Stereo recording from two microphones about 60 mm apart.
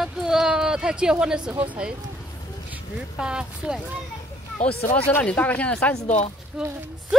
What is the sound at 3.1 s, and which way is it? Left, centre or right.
Speech, centre.